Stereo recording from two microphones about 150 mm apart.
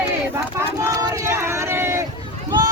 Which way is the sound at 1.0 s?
20° right (ahead or behind).